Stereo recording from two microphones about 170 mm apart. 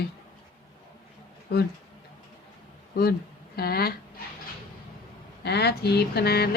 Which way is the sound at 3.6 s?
65° left (ahead or behind).